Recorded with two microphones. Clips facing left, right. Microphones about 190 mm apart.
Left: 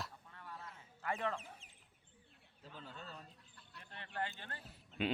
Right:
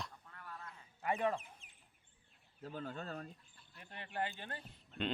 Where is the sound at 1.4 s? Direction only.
60° right (ahead or behind).